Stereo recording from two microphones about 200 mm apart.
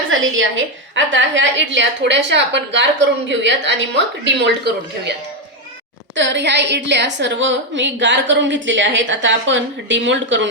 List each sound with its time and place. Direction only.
0.1 s a woman's voice: 75° right (ahead or behind); by 5.1 s 60° right (ahead or behind)
6.1 s a woman's voice: 65° right (ahead or behind)